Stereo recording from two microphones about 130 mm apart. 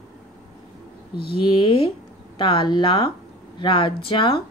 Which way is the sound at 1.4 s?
40° left (ahead or behind).